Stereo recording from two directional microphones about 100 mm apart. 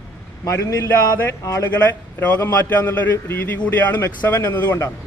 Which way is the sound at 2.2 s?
20° left (ahead or behind).